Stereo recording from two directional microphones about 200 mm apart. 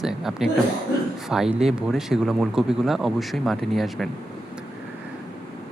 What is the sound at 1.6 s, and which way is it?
Speech, centre (ahead or behind).